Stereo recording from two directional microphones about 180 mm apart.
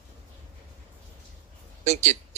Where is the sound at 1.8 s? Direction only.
40° right (ahead or behind).